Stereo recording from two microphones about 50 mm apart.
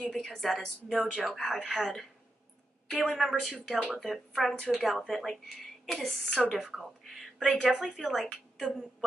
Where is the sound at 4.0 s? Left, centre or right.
Centre.